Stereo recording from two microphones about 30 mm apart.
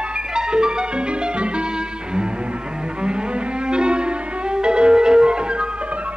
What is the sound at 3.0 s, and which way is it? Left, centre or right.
Music, right.